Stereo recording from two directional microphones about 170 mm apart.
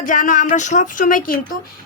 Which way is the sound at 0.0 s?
50° left (ahead or behind).